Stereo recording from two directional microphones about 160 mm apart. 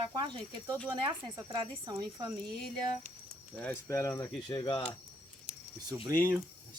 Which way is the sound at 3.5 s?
10° left (ahead or behind).